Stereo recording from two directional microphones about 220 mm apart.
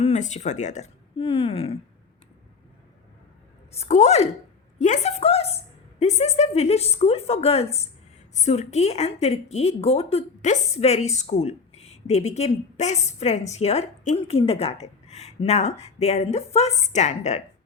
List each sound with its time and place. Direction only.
0.0 s speech: 30° left (ahead or behind)
3.8 s a woman's voice: 30° left (ahead or behind)